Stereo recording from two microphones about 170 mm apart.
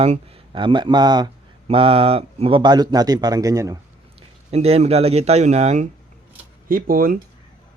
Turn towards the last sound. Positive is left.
turn(degrees=-60)  # may be behind; listen again after turning